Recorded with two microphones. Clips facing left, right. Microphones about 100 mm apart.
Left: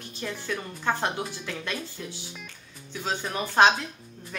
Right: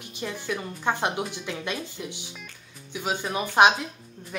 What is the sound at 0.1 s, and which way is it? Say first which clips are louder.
A woman's voice: right 1 dB; 15° right (ahead or behind).